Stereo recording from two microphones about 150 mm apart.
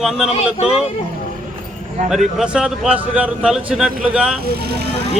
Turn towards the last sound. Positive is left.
turn(degrees=-90)